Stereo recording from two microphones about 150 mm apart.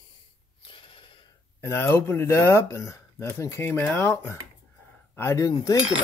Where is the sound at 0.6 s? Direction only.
35° left (ahead or behind).